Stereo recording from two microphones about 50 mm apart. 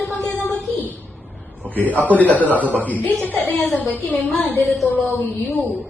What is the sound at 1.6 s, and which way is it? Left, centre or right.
A woman's voice, left.